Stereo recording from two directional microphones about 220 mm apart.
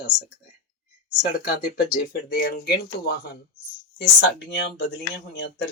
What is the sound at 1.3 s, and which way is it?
Speech, 40° left (ahead or behind).